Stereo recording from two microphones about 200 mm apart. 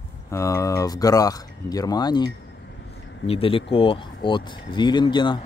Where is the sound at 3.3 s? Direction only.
30° left (ahead or behind).